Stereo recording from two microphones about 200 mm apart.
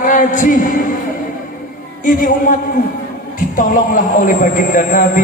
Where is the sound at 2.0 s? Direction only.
40° left (ahead or behind).